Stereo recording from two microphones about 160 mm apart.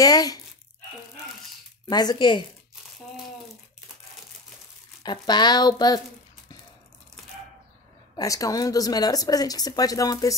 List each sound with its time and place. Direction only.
0.0 s speech: 25° left (ahead or behind)
1.9 s speech: 25° left (ahead or behind)
5.0 s speech: 25° left (ahead or behind)
8.2 s speech: 20° left (ahead or behind)